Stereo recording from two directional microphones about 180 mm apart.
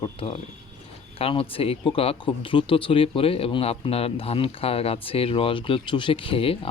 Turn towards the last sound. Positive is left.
turn(degrees=30)  # may be behind; listen again after turning